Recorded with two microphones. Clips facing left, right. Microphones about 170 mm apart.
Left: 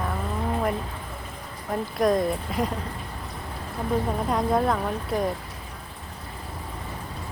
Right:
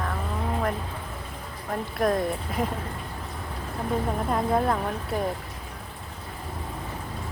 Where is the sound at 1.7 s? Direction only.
Centre (ahead or behind).